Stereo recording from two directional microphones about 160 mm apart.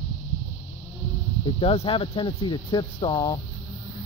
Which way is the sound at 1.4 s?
35° left (ahead or behind).